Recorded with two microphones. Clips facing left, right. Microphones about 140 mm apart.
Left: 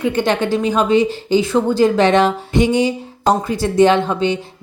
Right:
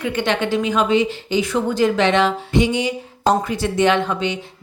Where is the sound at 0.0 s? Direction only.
35° left (ahead or behind).